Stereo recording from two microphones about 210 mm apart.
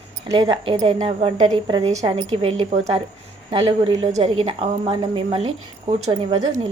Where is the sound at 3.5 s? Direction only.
20° right (ahead or behind).